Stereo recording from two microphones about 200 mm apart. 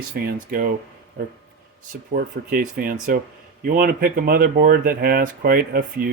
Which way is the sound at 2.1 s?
45° right (ahead or behind).